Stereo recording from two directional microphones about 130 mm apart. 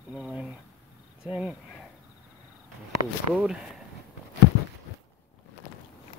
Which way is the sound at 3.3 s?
5° right (ahead or behind).